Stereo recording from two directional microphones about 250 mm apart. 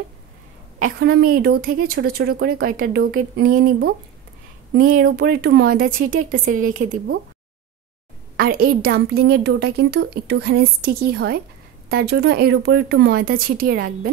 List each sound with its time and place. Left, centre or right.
0.7 s a woman's voice: right
4.7 s a woman's voice: right
8.4 s a woman's voice: right